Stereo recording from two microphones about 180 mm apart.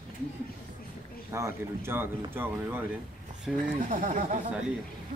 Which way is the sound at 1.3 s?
15° right (ahead or behind).